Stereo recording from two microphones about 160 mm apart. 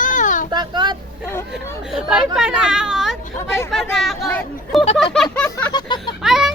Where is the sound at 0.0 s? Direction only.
55° left (ahead or behind).